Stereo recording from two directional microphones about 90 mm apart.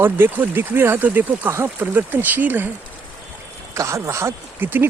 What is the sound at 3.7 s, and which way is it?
Speech, 35° right (ahead or behind).